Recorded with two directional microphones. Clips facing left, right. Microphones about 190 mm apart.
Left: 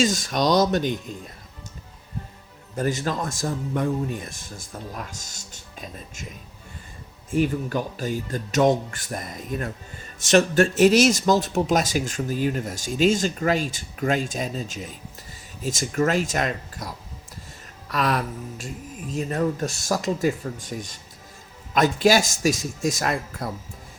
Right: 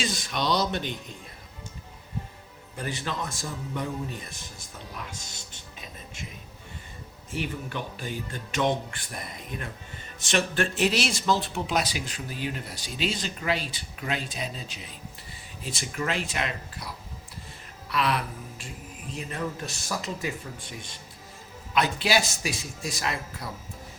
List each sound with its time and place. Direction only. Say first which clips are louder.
0.0 s speech: left 8 dB; 45° left (ahead or behind)
2.7 s speech: left 7 dB; 45° left (ahead or behind)
7.3 s speech: left 9 dB; 40° left (ahead or behind)